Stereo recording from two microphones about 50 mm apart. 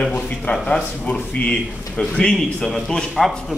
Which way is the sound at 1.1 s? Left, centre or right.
Left.